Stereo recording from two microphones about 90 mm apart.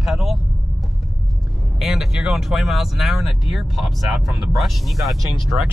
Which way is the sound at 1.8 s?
5° right (ahead or behind).